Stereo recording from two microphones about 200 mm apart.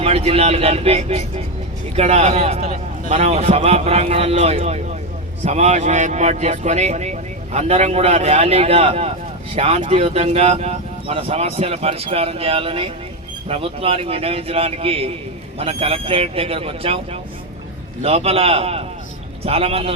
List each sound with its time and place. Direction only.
0.0 s speech: 30° right (ahead or behind)